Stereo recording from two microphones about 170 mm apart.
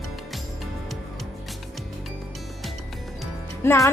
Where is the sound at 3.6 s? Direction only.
15° left (ahead or behind).